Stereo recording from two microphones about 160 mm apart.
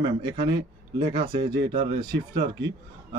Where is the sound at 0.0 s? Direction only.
25° right (ahead or behind).